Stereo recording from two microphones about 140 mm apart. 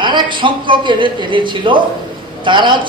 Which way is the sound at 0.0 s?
35° right (ahead or behind).